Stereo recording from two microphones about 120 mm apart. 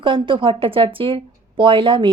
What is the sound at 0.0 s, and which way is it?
A woman's voice, 45° right (ahead or behind).